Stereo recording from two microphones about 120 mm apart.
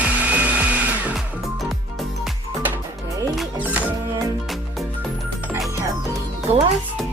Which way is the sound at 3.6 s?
15° right (ahead or behind).